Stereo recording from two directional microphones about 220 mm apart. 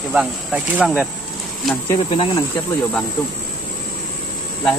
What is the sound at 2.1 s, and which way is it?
Speech, 25° left (ahead or behind).